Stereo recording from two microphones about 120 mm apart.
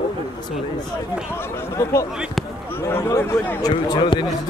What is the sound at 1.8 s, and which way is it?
Speech, 25° left (ahead or behind).